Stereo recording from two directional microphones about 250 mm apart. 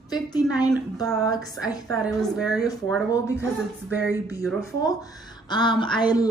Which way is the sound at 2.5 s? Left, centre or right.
Centre.